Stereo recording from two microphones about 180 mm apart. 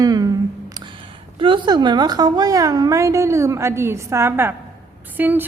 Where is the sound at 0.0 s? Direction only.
20° right (ahead or behind).